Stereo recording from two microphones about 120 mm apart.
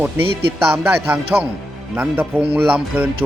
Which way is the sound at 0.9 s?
10° right (ahead or behind).